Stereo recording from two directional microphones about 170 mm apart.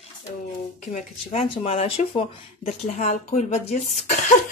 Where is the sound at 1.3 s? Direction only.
35° left (ahead or behind).